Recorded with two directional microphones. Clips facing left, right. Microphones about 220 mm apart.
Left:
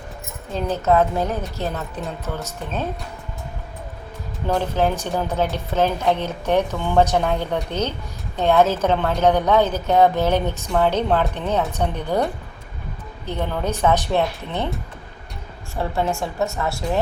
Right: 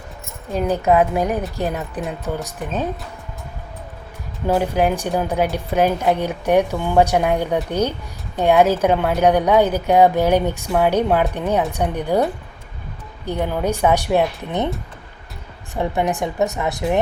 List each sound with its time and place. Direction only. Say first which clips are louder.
0.5 s a woman's voice: right 2 dB; 15° right (ahead or behind)
4.4 s a woman's voice: right 3 dB; 10° right (ahead or behind)
13.2 s a woman's voice: right 4 dB; 10° right (ahead or behind)
15.7 s a woman's voice: right 2 dB; 15° right (ahead or behind)